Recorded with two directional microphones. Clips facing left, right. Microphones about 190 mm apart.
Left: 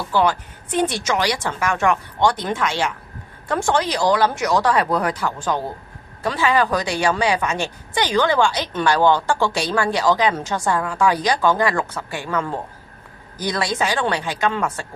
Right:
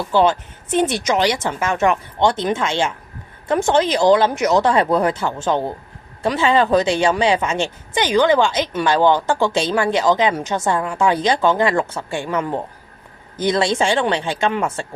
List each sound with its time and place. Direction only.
0.1 s a woman's voice: 25° right (ahead or behind)